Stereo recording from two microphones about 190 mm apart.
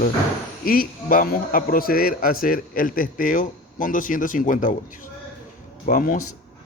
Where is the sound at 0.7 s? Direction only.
50° left (ahead or behind).